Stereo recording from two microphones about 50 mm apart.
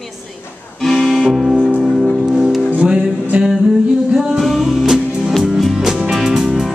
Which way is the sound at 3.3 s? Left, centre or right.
Right.